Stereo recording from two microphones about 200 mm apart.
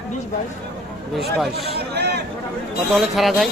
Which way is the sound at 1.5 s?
55° right (ahead or behind).